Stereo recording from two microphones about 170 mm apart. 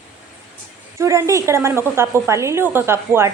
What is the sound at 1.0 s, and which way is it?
A woman's voice, 15° right (ahead or behind).